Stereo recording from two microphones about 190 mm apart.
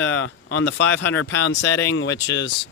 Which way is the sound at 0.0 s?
85° left.